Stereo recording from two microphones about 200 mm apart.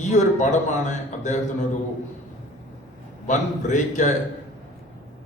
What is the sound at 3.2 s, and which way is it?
Speech, 40° left (ahead or behind).